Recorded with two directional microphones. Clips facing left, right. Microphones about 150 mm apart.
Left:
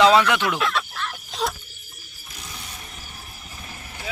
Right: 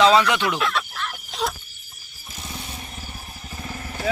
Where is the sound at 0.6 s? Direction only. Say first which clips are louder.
Even; centre (ahead or behind).